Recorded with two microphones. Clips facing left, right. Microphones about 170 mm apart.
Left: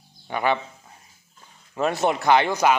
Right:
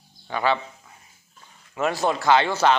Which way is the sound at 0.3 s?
15° left (ahead or behind).